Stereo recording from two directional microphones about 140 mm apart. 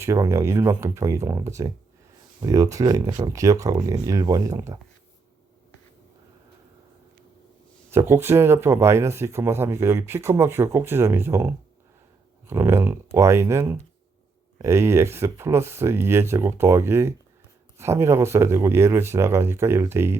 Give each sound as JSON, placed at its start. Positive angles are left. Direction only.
{"t": 0.0, "sound": "speech", "side_deg": -20}
{"t": 7.9, "sound": "speech", "side_deg": -15}